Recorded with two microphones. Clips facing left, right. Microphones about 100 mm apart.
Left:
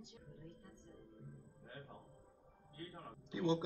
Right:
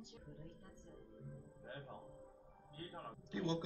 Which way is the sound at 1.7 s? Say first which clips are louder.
Right 3 dB; 40° right (ahead or behind).